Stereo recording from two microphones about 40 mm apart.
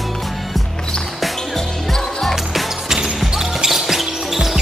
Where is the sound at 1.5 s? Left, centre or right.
Centre.